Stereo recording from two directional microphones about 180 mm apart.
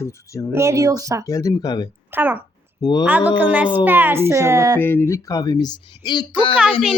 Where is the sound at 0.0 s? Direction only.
15° left (ahead or behind).